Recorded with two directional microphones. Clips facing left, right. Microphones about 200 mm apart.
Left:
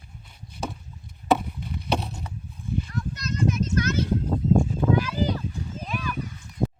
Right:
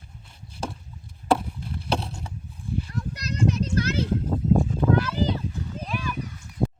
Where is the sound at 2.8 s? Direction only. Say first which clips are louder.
Left 1 dB; 35° right (ahead or behind).